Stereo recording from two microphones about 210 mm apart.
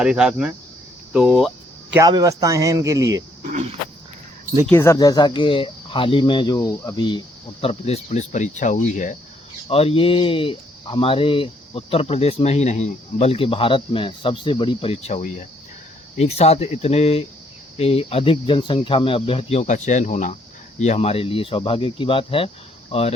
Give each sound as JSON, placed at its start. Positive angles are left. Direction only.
{"t": 0.0, "sound": "speech", "side_deg": -5}
{"t": 1.1, "sound": "cricket", "side_deg": 0}
{"t": 2.0, "sound": "speech", "side_deg": -15}
{"t": 3.4, "sound": "speech", "side_deg": -35}
{"t": 4.6, "sound": "speech", "side_deg": 10}